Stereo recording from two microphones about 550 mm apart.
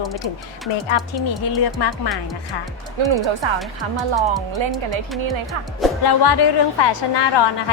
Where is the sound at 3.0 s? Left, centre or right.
Right.